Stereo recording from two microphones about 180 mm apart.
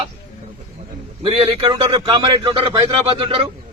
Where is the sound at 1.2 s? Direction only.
30° right (ahead or behind).